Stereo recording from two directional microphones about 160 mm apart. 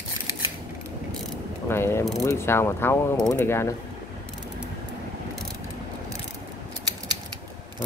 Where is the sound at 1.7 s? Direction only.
15° left (ahead or behind).